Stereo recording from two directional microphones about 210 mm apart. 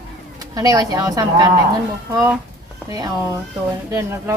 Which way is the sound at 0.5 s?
15° right (ahead or behind).